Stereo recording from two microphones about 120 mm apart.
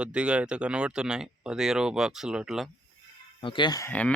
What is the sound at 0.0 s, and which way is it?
Speech, 10° right (ahead or behind).